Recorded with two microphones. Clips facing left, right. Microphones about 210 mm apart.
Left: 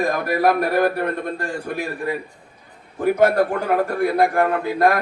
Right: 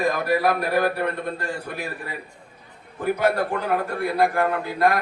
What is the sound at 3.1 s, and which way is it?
A man's voice, 50° left (ahead or behind).